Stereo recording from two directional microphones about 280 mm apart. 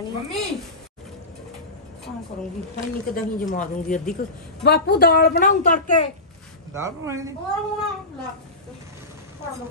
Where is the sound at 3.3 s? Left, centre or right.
Left.